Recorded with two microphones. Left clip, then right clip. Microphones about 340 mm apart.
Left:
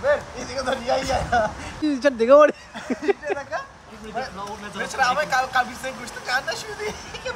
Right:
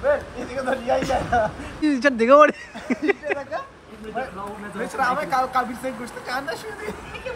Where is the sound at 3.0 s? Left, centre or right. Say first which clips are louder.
Even; left.